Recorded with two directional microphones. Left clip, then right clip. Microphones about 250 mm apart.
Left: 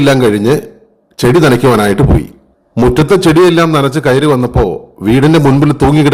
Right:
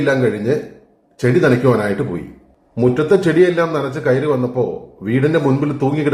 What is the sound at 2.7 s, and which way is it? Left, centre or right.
A man's voice, left.